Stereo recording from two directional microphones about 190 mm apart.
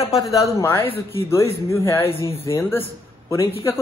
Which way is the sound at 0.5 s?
15° left (ahead or behind).